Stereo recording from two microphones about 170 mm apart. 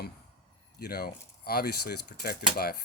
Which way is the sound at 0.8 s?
65° left (ahead or behind).